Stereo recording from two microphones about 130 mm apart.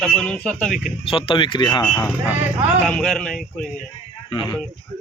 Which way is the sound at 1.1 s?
40° left (ahead or behind).